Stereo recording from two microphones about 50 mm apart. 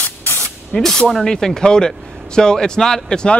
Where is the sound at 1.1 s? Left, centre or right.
Centre.